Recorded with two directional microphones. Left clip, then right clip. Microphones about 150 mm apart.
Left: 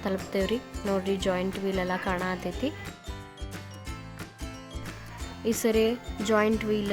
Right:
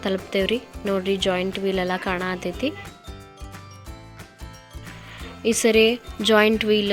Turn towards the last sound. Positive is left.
turn(degrees=-25)  # may be behind; listen again after turning